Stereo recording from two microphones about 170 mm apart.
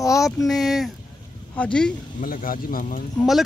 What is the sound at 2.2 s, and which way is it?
Speech, 55° left (ahead or behind).